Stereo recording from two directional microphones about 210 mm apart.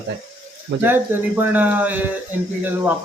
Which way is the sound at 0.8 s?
10° right (ahead or behind).